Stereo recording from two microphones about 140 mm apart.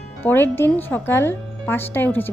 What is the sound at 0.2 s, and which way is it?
A woman's voice, 15° left (ahead or behind).